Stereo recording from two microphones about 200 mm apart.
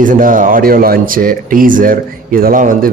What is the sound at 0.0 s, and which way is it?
Speech, 40° right (ahead or behind).